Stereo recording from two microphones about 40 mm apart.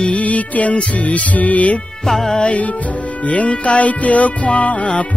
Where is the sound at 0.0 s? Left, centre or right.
Left.